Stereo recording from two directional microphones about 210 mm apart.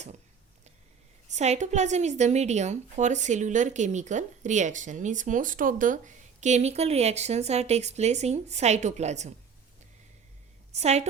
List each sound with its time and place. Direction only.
1.3 s a woman's voice: 35° right (ahead or behind)
10.7 s a woman's voice: 30° right (ahead or behind)